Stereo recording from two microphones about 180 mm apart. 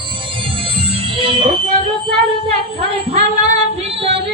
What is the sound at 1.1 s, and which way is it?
Music, 30° right (ahead or behind).